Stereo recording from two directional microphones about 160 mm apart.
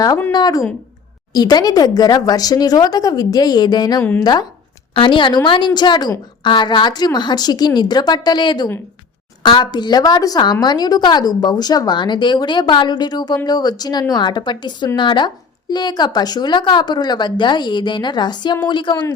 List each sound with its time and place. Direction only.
0.3 s a woman's voice: 25° left (ahead or behind)